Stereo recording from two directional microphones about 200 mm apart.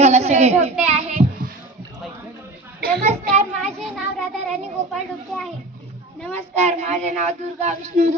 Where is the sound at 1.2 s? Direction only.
30° right (ahead or behind).